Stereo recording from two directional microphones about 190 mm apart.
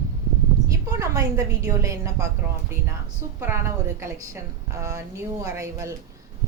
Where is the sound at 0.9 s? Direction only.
15° right (ahead or behind).